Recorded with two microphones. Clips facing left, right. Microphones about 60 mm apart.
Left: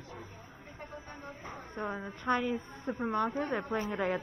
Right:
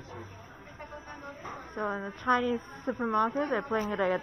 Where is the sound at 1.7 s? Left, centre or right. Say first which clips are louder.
Right 4 dB; right.